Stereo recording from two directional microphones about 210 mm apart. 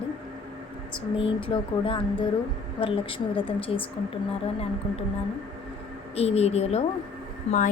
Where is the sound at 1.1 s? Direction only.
25° left (ahead or behind).